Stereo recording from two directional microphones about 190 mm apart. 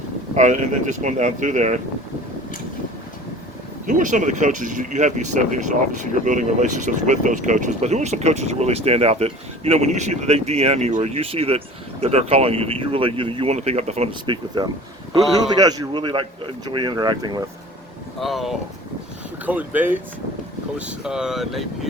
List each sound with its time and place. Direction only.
0.3 s speech: 40° right (ahead or behind)
3.8 s speech: 40° right (ahead or behind); by 17.4 s 20° right (ahead or behind)
18.2 s speech: centre (ahead or behind)